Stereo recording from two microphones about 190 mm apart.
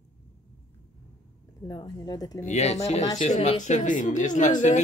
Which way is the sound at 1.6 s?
20° left (ahead or behind).